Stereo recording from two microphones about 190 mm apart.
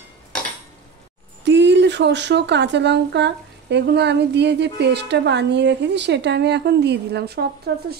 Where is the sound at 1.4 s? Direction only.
65° right (ahead or behind).